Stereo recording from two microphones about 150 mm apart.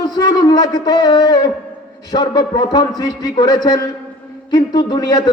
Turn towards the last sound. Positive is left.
turn(degrees=25)  # may be behind; listen again after turning